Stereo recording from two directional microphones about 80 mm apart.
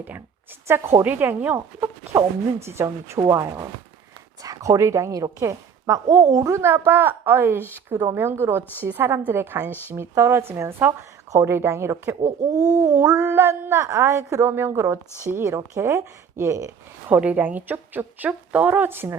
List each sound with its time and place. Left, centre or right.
0.7 s a woman's voice: right
1.0 s a woman's voice: right
2.1 s a woman's voice: right
4.4 s a woman's voice: right
12.6 s a woman's voice: right
14.7 s speech: right
15.3 s a woman's voice: right
17.1 s a woman's voice: centre